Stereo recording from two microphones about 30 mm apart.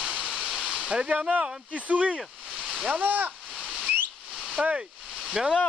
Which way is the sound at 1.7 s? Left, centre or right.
Right.